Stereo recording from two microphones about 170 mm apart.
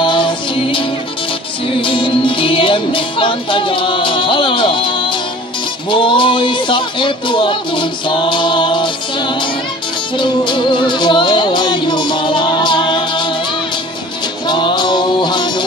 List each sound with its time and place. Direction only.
0.0 s music: 30° left (ahead or behind)
14.5 s music: 25° left (ahead or behind)